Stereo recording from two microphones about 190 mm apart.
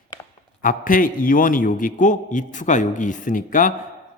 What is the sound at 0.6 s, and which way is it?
Speech, 45° left (ahead or behind).